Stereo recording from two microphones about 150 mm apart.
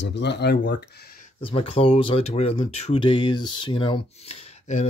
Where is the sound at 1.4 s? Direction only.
40° left (ahead or behind).